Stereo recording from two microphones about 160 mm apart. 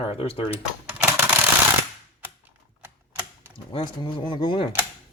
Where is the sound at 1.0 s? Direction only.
15° right (ahead or behind).